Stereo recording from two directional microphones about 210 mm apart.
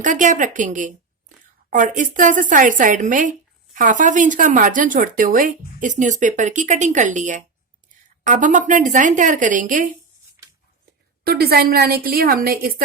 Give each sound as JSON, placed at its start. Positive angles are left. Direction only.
{"t": 0.0, "sound": "speech", "side_deg": -35}
{"t": 10.4, "sound": "a sound", "side_deg": -10}
{"t": 11.2, "sound": "a woman's voice", "side_deg": -45}